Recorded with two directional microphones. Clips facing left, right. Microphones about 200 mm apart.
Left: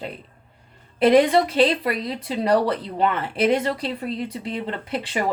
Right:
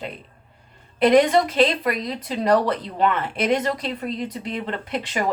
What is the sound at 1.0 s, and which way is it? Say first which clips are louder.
Speech: even; 30° left (ahead or behind).